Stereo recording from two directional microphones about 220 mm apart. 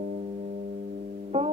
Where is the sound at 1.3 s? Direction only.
25° right (ahead or behind).